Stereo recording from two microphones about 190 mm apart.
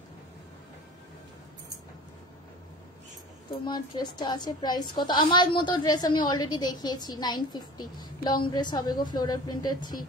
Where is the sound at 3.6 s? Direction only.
25° left (ahead or behind).